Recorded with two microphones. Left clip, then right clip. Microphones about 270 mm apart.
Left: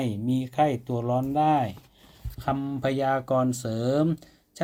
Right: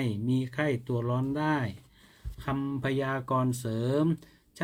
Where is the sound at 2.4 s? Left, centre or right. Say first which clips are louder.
Left 5 dB; centre.